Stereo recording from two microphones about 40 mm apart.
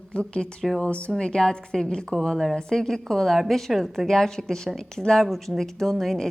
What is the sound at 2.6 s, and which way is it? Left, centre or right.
A woman's voice, centre.